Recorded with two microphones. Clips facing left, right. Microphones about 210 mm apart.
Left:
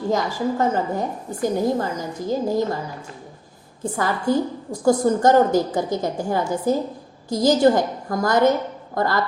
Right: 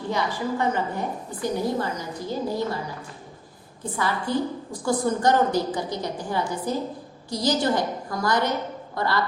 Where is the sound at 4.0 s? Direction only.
45° left (ahead or behind).